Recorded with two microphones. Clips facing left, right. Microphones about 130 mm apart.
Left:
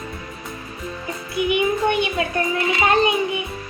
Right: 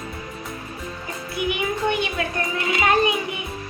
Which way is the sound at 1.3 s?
20° left (ahead or behind).